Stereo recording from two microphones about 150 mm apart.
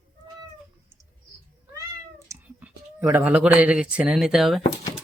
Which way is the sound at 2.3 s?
10° right (ahead or behind).